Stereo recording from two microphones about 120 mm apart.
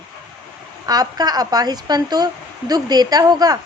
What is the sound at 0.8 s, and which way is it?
Speech, 30° right (ahead or behind).